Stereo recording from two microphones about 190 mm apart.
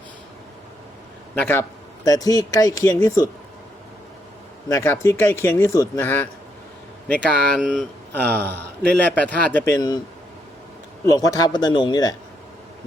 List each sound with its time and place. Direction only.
1.4 s speech: 10° left (ahead or behind)
4.7 s speech: 15° left (ahead or behind)
11.0 s speech: 15° left (ahead or behind)